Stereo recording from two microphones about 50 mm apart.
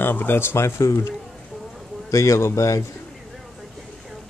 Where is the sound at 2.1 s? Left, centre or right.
Left.